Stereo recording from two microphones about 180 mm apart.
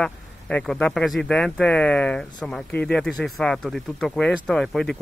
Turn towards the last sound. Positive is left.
turn(degrees=0)  # may be behind; listen again after turning